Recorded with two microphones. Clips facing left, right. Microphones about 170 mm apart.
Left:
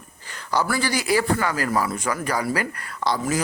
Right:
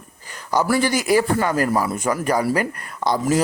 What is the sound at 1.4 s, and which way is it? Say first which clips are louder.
Speech: right 4 dB; 20° right (ahead or behind).